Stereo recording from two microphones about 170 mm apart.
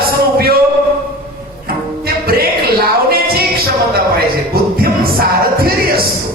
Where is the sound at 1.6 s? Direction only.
60° right (ahead or behind).